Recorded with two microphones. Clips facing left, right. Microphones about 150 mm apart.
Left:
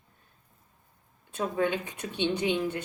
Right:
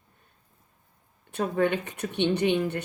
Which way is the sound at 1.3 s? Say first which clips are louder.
Right 3 dB; 65° right (ahead or behind).